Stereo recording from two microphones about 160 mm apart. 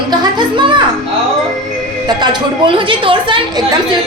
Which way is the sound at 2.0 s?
25° right (ahead or behind).